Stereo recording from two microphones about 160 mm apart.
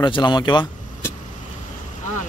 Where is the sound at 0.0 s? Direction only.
30° left (ahead or behind).